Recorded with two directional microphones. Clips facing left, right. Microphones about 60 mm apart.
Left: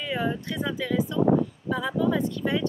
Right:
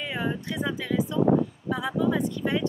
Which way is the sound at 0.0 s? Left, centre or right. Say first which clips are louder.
Left 2 dB; centre.